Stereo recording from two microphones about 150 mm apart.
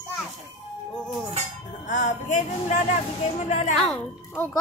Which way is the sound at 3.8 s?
5° left (ahead or behind).